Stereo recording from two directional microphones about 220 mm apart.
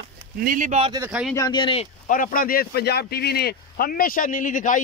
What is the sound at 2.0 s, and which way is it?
Speech, 40° left (ahead or behind).